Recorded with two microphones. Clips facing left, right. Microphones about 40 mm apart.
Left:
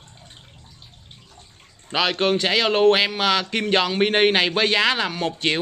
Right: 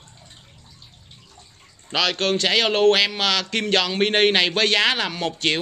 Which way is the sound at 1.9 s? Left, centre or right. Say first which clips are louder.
Left 1 dB; left.